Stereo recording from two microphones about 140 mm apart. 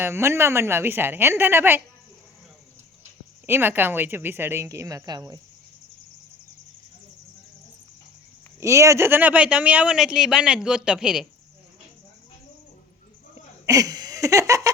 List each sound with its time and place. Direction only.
0.0 s speech: 20° right (ahead or behind)
3.0 s speech: 15° right (ahead or behind)
8.6 s speech: 20° right (ahead or behind); by 11.3 s 5° right (ahead or behind)
13.7 s laughter: 25° right (ahead or behind)